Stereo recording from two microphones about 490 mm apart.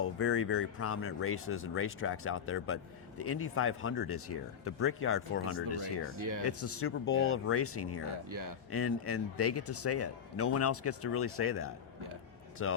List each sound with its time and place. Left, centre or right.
0.0 s speech: left
6.1 s speech: right
6.4 s speech: left
8.3 s speech: right
8.7 s speech: left